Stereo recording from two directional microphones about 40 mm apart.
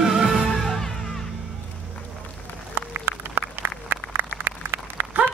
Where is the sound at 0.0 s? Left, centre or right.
Centre.